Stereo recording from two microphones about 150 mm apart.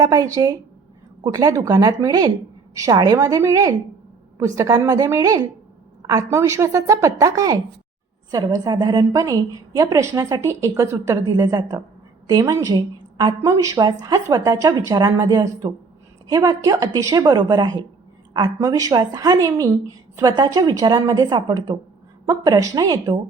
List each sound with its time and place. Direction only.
0.0 s a woman's voice: 25° right (ahead or behind)